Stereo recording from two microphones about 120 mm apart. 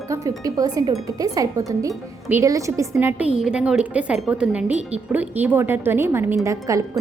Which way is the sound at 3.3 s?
5° right (ahead or behind).